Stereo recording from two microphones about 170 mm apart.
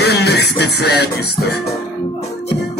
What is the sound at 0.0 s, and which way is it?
Music, 70° left (ahead or behind).